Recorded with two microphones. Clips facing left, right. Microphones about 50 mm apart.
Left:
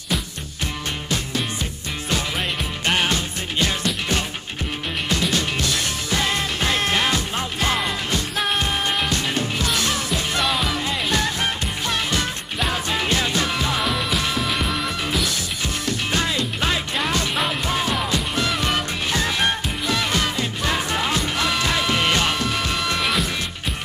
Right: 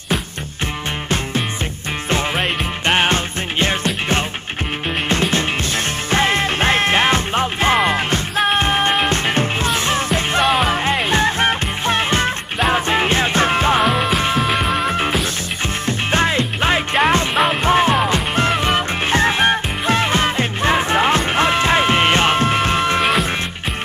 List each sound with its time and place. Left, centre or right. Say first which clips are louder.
2.3 s music: right 5 dB; right
5.3 s music: right 3 dB; right
13.9 s music: right 6 dB; right